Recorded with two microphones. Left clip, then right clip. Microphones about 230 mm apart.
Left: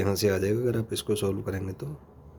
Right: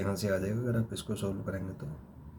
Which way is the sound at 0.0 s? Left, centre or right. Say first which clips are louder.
Left 7 dB; left.